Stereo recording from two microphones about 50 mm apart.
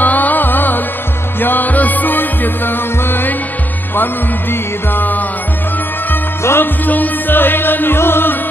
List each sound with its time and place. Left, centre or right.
0.0 s music: left
6.4 s music: left
6.9 s music: left